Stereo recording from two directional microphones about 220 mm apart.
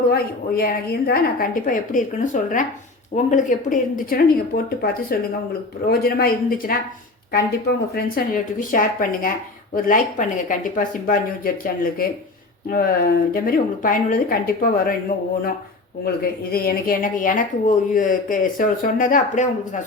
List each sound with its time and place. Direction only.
0.1 s speech: 40° left (ahead or behind)
7.9 s speech: 40° left (ahead or behind)
16.0 s speech: 45° left (ahead or behind)